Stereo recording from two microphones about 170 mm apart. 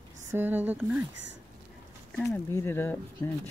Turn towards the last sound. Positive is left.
turn(degrees=20)  # may be behind; listen again after turning